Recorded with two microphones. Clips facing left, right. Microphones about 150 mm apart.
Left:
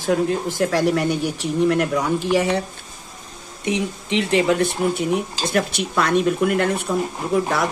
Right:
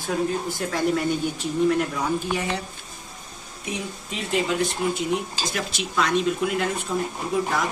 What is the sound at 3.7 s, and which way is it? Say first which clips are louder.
A man's voice: left 9 dB; 80° left.